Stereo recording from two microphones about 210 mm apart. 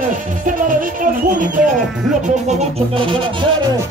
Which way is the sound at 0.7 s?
40° right (ahead or behind).